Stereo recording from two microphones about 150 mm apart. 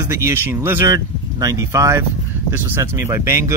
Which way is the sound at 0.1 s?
15° right (ahead or behind).